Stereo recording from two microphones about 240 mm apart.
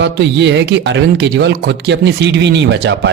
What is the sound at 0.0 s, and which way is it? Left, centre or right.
Speech, right.